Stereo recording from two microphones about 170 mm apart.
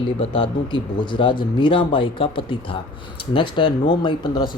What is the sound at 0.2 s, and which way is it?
Speech, 30° left (ahead or behind).